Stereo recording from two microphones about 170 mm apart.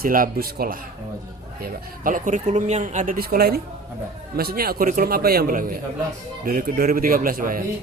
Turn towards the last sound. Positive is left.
turn(degrees=-55)  # may be behind; listen again after turning